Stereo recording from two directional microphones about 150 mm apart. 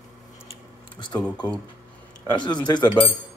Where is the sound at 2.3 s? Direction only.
30° left (ahead or behind).